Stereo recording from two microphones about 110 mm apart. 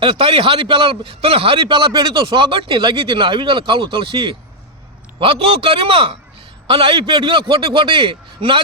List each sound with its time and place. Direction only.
0.0 s a man's voice: 55° right (ahead or behind)